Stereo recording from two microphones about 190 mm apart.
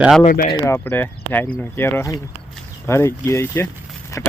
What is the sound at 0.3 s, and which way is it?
Speech, 50° left (ahead or behind).